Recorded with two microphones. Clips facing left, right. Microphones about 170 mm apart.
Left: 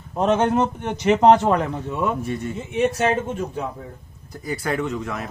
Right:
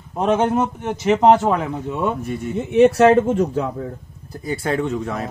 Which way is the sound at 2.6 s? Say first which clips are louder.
Right 9 dB; 70° right (ahead or behind).